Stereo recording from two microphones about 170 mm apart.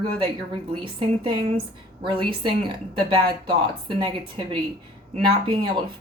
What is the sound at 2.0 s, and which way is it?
A woman's voice, 30° right (ahead or behind).